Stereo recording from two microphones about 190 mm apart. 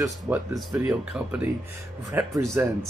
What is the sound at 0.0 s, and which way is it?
Speech, 15° right (ahead or behind).